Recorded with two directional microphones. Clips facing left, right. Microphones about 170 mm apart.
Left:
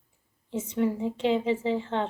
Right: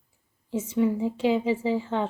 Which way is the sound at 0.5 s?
10° right (ahead or behind).